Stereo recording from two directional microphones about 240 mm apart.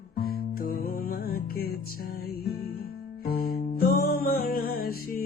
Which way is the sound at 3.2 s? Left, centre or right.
Left.